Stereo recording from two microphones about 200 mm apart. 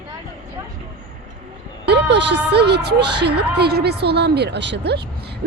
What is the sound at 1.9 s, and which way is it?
Speech, 55° right (ahead or behind).